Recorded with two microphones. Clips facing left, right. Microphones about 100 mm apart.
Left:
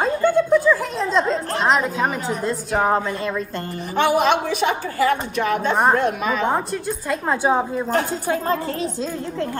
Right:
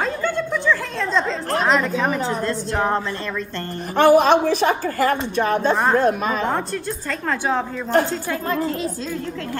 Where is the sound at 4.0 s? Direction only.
40° right (ahead or behind).